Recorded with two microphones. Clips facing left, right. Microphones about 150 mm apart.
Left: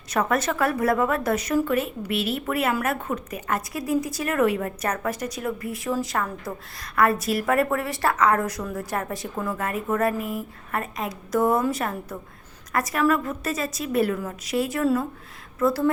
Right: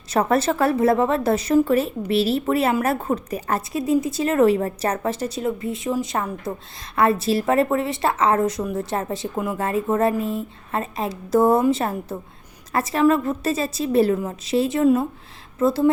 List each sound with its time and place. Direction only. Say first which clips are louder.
0.1 s a woman's voice: right 4 dB; 30° right (ahead or behind)
9.6 s a woman's voice: right 5 dB; 30° right (ahead or behind)